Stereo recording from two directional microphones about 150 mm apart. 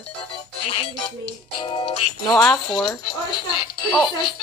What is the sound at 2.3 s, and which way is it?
Speech, centre (ahead or behind).